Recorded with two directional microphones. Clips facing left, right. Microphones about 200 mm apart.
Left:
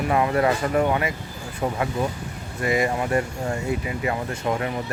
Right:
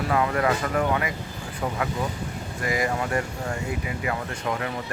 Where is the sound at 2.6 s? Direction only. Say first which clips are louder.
Left 4 dB; 25° left (ahead or behind).